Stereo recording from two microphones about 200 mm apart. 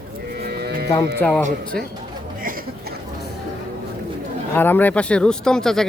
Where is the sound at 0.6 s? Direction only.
50° right (ahead or behind).